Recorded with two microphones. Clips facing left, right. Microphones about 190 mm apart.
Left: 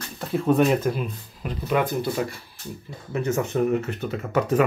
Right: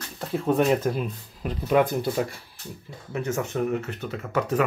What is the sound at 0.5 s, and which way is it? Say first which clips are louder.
Speech: left 2 dB; 30° right (ahead or behind).